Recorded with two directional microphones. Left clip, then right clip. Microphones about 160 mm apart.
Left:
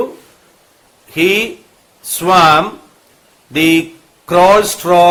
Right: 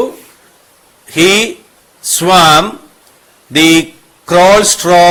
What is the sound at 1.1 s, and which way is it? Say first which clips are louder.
Speech: right 4 dB; 30° right (ahead or behind).